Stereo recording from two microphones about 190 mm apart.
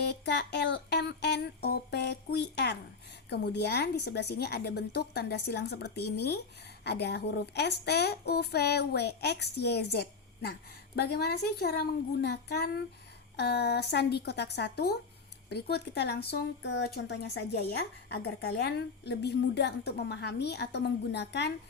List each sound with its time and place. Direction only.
0.0 s speech: 60° left (ahead or behind)